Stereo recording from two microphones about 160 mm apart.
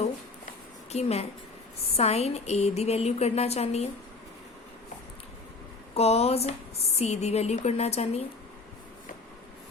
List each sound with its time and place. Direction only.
0.9 s speech: 40° left (ahead or behind)
5.9 s speech: 40° left (ahead or behind)